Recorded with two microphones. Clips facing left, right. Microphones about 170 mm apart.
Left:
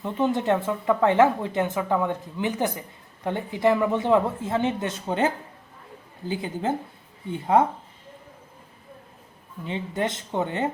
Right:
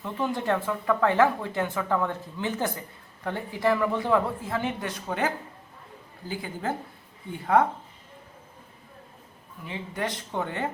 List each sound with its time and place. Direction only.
0.0 s speech: 20° left (ahead or behind)
9.6 s speech: 25° left (ahead or behind)